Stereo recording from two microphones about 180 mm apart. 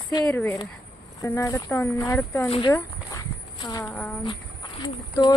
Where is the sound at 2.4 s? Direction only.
30° left (ahead or behind).